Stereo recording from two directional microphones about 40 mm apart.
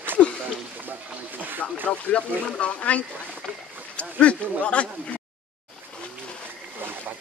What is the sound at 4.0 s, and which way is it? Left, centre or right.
Speech, left.